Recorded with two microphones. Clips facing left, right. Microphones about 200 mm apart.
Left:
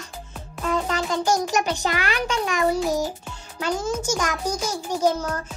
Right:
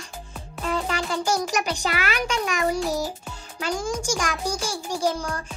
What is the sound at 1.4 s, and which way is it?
Speech, 10° right (ahead or behind).